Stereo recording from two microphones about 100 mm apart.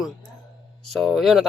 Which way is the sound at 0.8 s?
Centre (ahead or behind).